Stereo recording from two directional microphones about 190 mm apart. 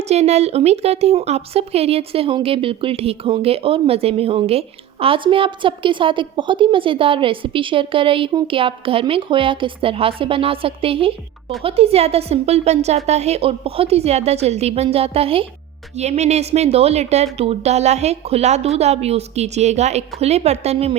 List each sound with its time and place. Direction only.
0.0 s a woman's voice: 35° right (ahead or behind)